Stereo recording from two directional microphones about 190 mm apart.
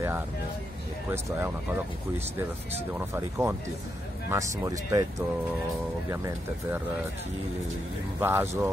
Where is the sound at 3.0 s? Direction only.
10° right (ahead or behind).